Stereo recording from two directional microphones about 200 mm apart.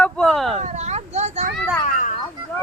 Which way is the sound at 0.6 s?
35° right (ahead or behind).